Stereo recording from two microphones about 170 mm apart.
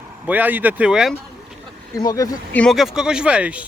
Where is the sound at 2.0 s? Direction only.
20° left (ahead or behind).